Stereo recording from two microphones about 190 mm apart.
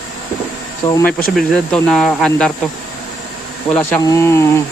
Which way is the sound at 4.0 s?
15° left (ahead or behind).